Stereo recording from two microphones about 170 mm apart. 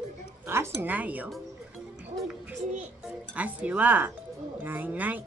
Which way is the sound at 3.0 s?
5° right (ahead or behind).